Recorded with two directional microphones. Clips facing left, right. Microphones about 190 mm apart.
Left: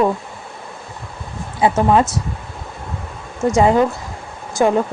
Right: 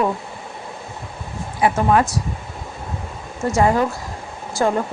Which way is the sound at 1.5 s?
25° left (ahead or behind).